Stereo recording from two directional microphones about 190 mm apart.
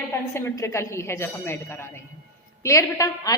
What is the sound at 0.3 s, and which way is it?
A woman's voice, 15° left (ahead or behind).